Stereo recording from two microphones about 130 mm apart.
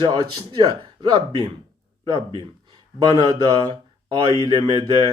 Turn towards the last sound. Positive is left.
turn(degrees=-35)  # may be behind; listen again after turning